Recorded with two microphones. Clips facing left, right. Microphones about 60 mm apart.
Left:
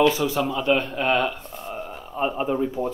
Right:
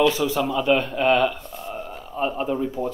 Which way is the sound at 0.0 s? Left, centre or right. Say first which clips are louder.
Even; centre.